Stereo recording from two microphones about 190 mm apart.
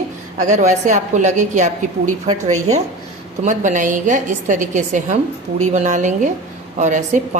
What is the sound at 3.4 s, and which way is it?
A woman's voice, 40° right (ahead or behind).